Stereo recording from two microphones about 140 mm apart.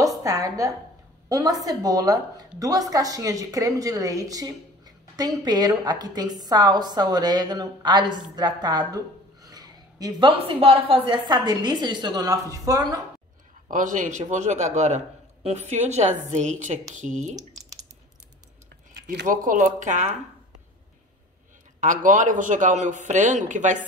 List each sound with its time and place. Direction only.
0.2 s a woman's voice: 25° right (ahead or behind)
10.4 s a woman's voice: 40° right (ahead or behind); by 13.0 s 25° right (ahead or behind)
13.7 s a man's voice: 65° right (ahead or behind)
19.0 s a man's voice: 70° right (ahead or behind)
21.7 s a man's voice: 65° right (ahead or behind)